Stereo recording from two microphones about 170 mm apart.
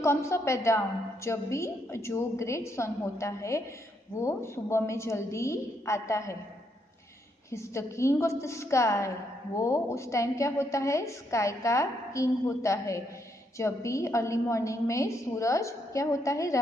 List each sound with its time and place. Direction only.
0.0 s a woman's voice: 15° left (ahead or behind)
7.5 s a woman's voice: 15° left (ahead or behind)